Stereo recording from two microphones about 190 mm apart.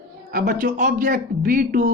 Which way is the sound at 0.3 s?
50° right (ahead or behind).